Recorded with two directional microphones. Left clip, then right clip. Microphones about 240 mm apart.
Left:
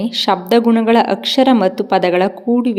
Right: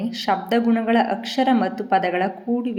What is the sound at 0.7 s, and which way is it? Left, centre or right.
Speech, left.